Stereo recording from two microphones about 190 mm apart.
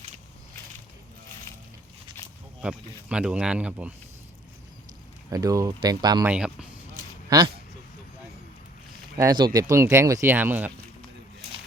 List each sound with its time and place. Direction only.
2.6 s speech: 5° right (ahead or behind)
5.3 s speech: 20° right (ahead or behind)
6.2 s speech: 5° right (ahead or behind)
7.3 s speech: 20° right (ahead or behind)
9.1 s speech: 20° right (ahead or behind)